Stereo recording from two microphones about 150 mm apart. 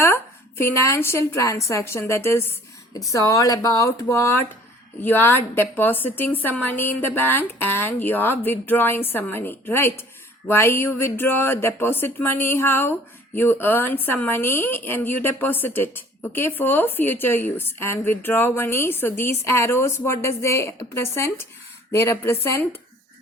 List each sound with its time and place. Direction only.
0.6 s a woman's voice: 15° left (ahead or behind)